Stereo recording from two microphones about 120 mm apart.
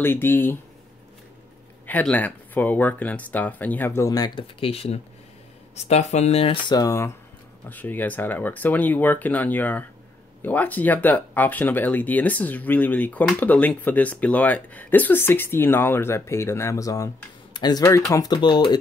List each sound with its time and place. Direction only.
0.0 s speech: 15° left (ahead or behind)
1.9 s speech: 15° left (ahead or behind); by 6.6 s 55° left (ahead or behind)
6.7 s speech: 30° left (ahead or behind)
7.7 s speech: 15° left (ahead or behind); by 18.8 s 40° left (ahead or behind)